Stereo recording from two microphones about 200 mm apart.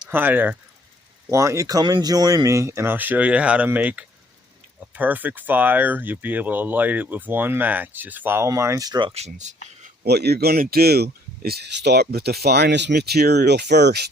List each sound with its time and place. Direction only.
0.1 s speech: 10° right (ahead or behind); by 9.6 s 35° right (ahead or behind)
10.0 s speech: 55° right (ahead or behind)